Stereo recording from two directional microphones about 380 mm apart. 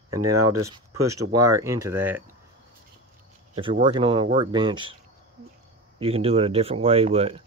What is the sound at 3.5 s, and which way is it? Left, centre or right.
Speech, centre.